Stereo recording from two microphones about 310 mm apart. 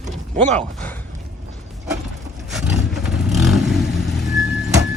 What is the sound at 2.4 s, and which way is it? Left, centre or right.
Vehicle, centre.